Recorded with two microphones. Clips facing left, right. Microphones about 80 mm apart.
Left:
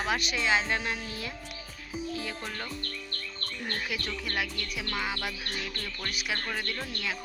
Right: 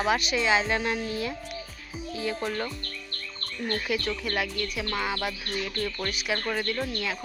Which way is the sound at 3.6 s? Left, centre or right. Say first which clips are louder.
Right 7 dB; centre.